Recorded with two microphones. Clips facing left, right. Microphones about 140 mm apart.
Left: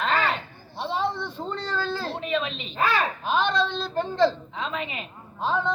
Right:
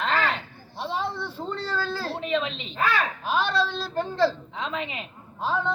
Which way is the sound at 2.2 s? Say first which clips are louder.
Right 1 dB; 20° right (ahead or behind).